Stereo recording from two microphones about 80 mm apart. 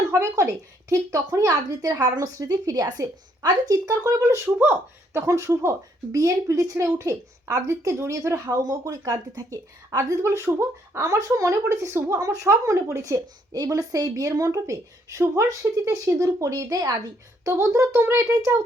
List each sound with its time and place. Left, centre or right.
0.1 s speech: right
4.5 s a woman's voice: right
8.4 s a woman's voice: right
17.4 s a woman's voice: right